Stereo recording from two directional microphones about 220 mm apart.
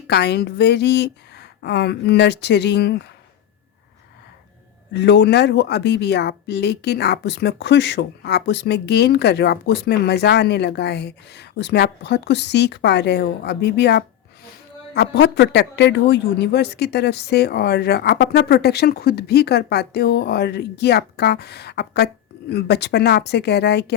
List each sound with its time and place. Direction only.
0.1 s speech: 50° left (ahead or behind)
4.9 s speech: 50° left (ahead or behind)